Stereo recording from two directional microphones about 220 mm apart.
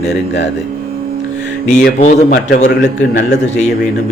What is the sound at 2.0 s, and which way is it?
Speech, 35° left (ahead or behind).